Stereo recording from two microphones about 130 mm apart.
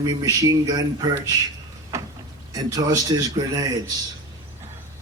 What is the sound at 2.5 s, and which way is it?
Speech, 30° right (ahead or behind).